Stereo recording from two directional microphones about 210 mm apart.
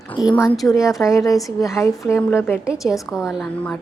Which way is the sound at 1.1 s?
15° left (ahead or behind).